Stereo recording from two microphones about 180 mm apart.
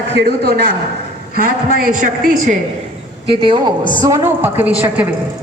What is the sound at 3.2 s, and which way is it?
A woman's voice, 30° right (ahead or behind).